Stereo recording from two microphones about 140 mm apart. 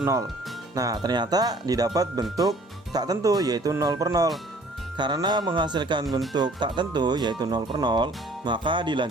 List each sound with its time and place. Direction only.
0.0 s speech: 25° right (ahead or behind)